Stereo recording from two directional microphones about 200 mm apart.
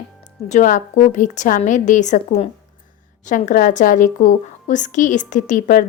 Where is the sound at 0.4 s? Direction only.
40° left (ahead or behind).